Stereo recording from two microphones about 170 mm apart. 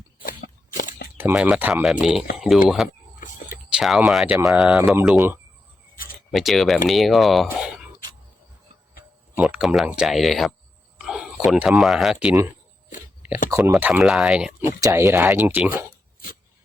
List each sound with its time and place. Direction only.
0.2 s a sound: 55° left (ahead or behind)
1.2 s speech: 5° right (ahead or behind)
9.3 s speech: 5° right (ahead or behind)
13.5 s speech: 15° right (ahead or behind)
14.8 s speech: 15° right (ahead or behind)